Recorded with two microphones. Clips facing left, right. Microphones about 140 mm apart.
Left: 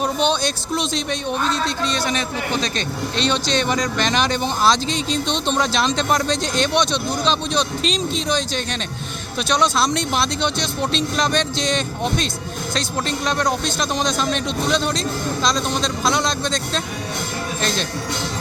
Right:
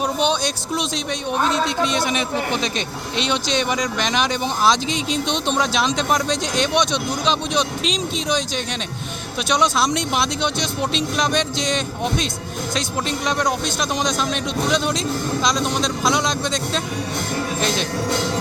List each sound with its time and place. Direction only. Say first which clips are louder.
1.5 s speech: right 2 dB; 20° right (ahead or behind)